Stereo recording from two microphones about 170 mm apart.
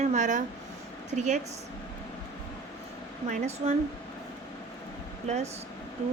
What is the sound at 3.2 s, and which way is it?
Speech, 40° right (ahead or behind).